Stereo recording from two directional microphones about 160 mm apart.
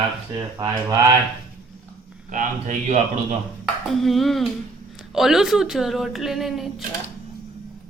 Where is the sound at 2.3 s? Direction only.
50° right (ahead or behind).